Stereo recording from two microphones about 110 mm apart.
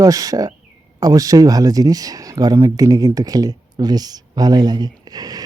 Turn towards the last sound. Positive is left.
turn(degrees=-35)  # may be behind; listen again after turning